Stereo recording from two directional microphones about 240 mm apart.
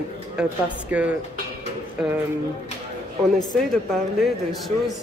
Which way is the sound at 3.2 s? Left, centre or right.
Centre.